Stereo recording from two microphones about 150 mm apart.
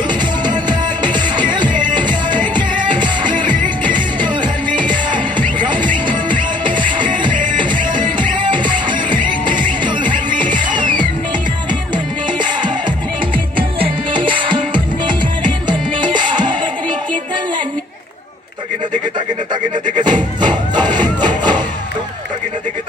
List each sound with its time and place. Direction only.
0.4 s music: 30° right (ahead or behind)
10.3 s music: 30° right (ahead or behind)
20.0 s music: 30° right (ahead or behind)